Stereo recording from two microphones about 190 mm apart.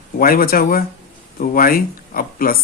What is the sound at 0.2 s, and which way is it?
Speech, 50° left (ahead or behind).